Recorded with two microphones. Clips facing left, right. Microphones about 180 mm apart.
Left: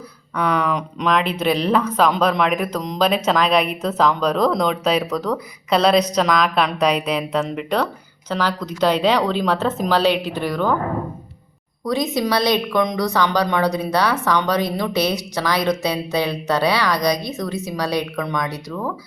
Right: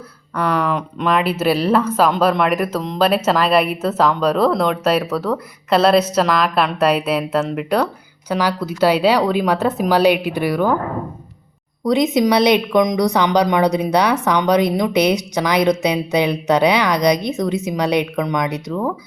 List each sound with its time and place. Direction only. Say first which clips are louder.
0.3 s a woman's voice: right 1 dB; 5° right (ahead or behind)
11.9 s a woman's voice: right 5 dB; 20° right (ahead or behind)